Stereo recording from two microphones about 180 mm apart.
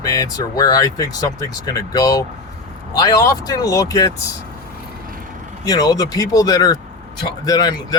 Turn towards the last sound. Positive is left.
turn(degrees=20)  # may be behind; listen again after turning